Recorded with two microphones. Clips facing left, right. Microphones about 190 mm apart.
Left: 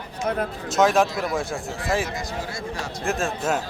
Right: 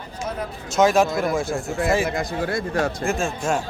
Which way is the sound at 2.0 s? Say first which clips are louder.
Right 6 dB; 55° right (ahead or behind).